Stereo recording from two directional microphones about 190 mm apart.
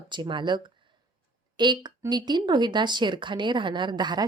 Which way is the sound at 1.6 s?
25° right (ahead or behind).